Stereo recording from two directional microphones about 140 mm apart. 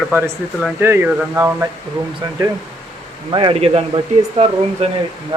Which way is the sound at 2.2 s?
30° right (ahead or behind).